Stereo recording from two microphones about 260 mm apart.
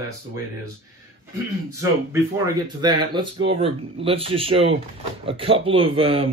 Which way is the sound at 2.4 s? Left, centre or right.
Centre.